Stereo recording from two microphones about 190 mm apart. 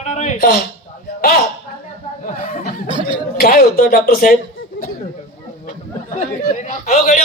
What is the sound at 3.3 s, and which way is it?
A man's voice, 50° left (ahead or behind).